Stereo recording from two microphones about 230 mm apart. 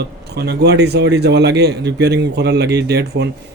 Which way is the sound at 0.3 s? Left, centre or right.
Right.